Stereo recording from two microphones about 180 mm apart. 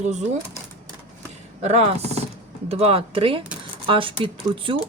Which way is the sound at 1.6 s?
35° right (ahead or behind).